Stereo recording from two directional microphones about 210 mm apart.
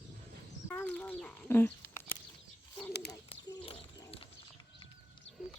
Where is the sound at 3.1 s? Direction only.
20° left (ahead or behind).